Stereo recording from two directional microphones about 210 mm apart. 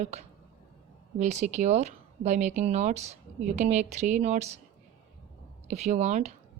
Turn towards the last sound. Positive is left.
turn(degrees=-35)  # may be behind; listen again after turning